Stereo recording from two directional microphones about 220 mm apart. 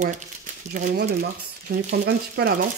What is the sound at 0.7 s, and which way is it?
Speech, 40° right (ahead or behind).